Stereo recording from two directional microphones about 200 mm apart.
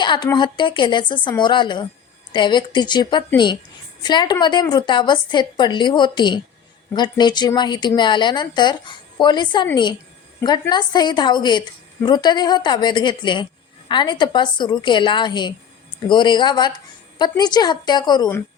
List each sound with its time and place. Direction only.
0.0 s a woman's voice: 20° left (ahead or behind)